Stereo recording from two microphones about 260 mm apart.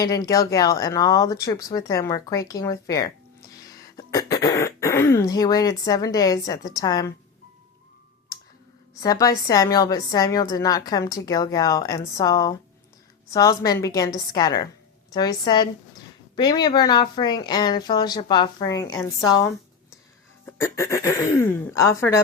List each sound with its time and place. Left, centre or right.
0.0 s a woman's voice: centre
9.0 s a woman's voice: centre
20.6 s a woman's voice: centre